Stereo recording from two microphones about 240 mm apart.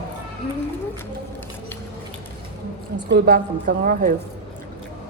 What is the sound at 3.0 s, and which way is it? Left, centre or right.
A woman's voice, right.